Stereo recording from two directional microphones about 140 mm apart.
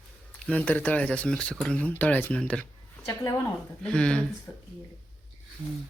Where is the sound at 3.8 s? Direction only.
5° left (ahead or behind).